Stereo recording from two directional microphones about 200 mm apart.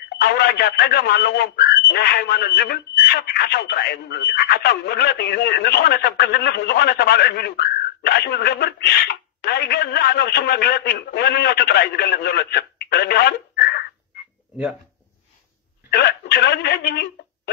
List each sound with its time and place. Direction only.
0.2 s speech: 55° left (ahead or behind)
15.9 s speech: 55° left (ahead or behind)